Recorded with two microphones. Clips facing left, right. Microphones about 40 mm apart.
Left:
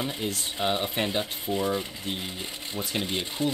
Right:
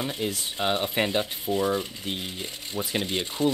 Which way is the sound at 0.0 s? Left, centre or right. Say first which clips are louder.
Right 1 dB; centre.